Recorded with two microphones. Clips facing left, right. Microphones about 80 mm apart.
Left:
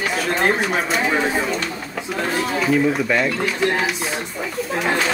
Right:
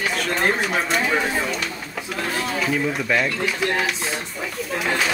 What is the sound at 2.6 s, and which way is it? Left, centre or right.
Speech, centre.